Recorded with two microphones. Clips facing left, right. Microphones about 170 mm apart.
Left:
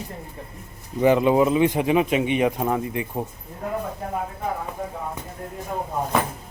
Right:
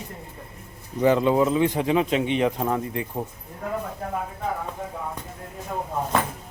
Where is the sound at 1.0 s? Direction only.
15° left (ahead or behind).